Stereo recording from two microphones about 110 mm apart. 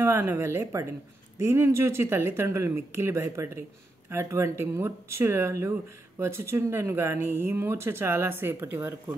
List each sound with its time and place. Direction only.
0.0 s speech: 20° right (ahead or behind)